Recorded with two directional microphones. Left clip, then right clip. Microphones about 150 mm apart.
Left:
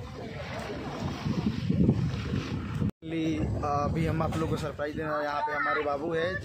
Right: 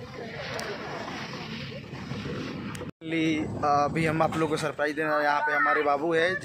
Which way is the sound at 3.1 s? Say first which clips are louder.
Right 5 dB; 10° left (ahead or behind).